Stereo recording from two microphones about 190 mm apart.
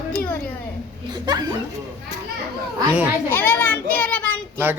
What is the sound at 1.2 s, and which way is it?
Speech, 20° right (ahead or behind).